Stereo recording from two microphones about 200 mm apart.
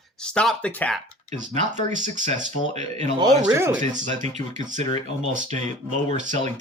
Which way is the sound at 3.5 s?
15° right (ahead or behind).